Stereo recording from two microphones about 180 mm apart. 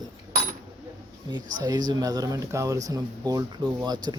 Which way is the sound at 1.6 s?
25° right (ahead or behind).